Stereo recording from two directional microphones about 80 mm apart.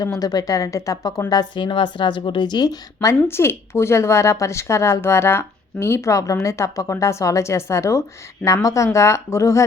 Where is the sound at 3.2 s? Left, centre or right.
Left.